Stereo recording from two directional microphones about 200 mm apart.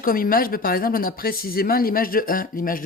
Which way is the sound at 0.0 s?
45° left (ahead or behind).